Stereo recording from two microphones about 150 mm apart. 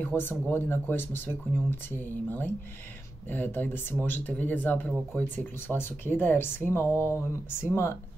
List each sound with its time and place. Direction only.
0.0 s speech: 15° left (ahead or behind)